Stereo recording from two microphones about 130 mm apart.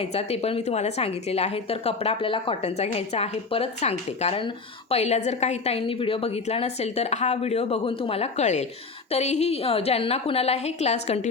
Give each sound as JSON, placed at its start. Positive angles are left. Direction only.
{"t": 0.1, "sound": "a woman's voice", "side_deg": 50}
{"t": 2.6, "sound": "a woman's voice", "side_deg": 55}